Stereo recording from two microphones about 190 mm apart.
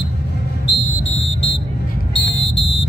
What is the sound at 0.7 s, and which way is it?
Music, 70° left (ahead or behind).